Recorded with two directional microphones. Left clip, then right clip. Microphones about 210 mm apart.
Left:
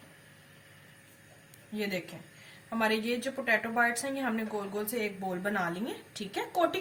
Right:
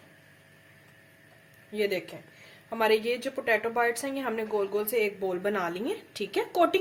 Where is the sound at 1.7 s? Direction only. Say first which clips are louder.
Right 6 dB; 45° right (ahead or behind).